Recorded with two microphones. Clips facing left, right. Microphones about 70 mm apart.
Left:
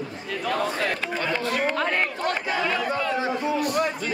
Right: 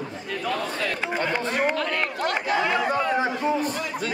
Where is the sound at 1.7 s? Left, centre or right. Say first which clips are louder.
Left 2 dB; left.